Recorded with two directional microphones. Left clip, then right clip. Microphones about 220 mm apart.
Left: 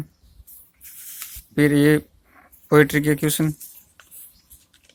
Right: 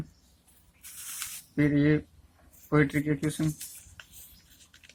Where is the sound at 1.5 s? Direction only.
50° left (ahead or behind).